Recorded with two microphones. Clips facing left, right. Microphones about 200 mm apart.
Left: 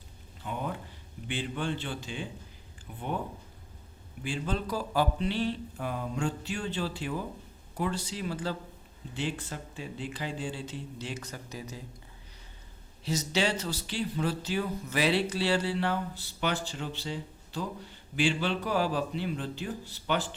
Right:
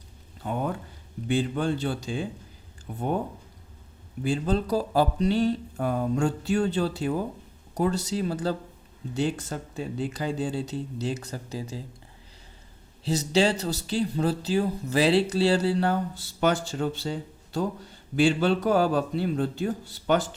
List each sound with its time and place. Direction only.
0.4 s speech: 45° right (ahead or behind)
4.2 s speech: 35° right (ahead or behind)
13.1 s a man's voice: 35° right (ahead or behind)